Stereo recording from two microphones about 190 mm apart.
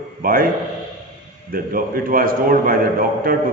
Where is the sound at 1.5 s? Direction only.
50° right (ahead or behind).